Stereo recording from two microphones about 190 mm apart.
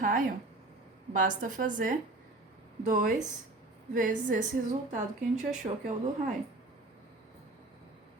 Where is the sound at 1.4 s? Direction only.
45° right (ahead or behind).